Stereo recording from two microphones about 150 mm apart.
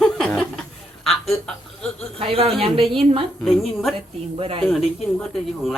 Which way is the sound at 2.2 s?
40° right (ahead or behind).